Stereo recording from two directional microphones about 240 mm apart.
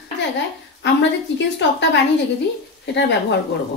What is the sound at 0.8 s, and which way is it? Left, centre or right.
A woman's voice, left.